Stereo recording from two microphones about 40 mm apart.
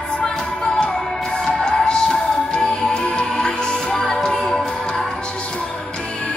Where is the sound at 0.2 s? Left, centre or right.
Left.